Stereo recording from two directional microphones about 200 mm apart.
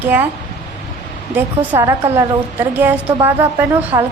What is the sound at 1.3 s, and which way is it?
A woman's voice, 10° right (ahead or behind).